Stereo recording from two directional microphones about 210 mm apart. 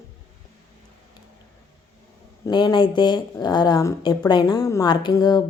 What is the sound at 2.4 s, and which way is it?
A woman's voice, 20° left (ahead or behind).